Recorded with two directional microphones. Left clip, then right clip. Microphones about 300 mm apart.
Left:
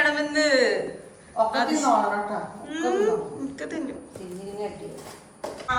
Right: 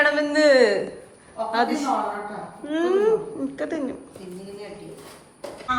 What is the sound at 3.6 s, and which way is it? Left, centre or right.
Speech, centre.